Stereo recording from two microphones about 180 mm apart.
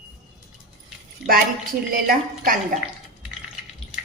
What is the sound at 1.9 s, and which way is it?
Speech, 55° right (ahead or behind).